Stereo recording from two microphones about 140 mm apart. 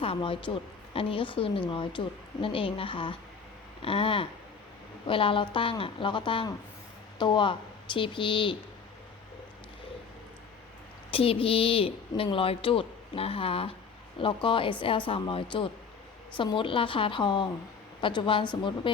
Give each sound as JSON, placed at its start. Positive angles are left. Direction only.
{"t": 0.0, "sound": "a woman's voice", "side_deg": 40}
{"t": 11.1, "sound": "a woman's voice", "side_deg": 40}